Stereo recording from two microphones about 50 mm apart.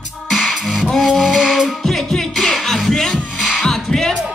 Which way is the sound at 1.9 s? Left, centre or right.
Centre.